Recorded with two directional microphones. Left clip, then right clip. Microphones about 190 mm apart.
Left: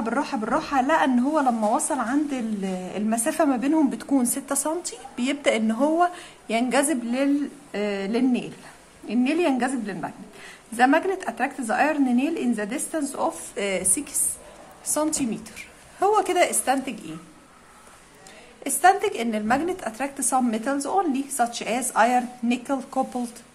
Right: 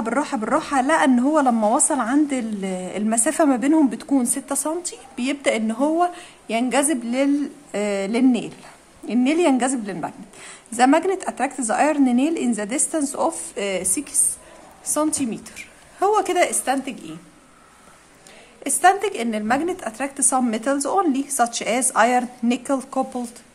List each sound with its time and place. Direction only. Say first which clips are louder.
0.0 s a woman's voice: right 3 dB; 20° right (ahead or behind)
18.6 s speech: right 2 dB; 10° right (ahead or behind)